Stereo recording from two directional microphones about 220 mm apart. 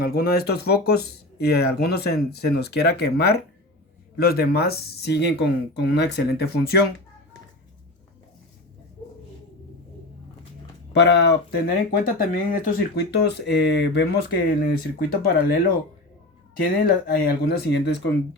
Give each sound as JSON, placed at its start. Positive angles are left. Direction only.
{"t": 0.0, "sound": "speech", "side_deg": 45}
{"t": 10.9, "sound": "speech", "side_deg": 50}
{"t": 11.9, "sound": "speech", "side_deg": 40}
{"t": 16.8, "sound": "speech", "side_deg": 45}